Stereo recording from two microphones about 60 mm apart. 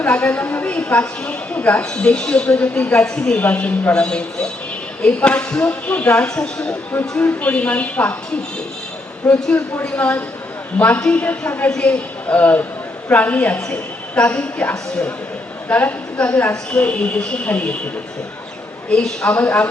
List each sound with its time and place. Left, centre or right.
0.0 s a woman's voice: left
1.8 s speech: centre
3.4 s speech: left
7.2 s a woman's voice: left
9.2 s a woman's voice: left
19.2 s a woman's voice: left